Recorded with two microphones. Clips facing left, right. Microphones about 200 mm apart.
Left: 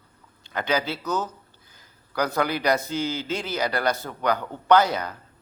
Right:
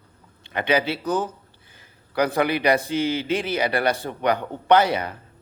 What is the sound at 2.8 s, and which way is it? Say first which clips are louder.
Speech: right 4 dB; 55° right (ahead or behind).